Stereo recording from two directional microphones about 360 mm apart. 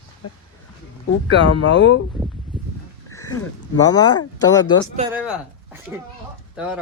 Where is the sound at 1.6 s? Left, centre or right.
Left.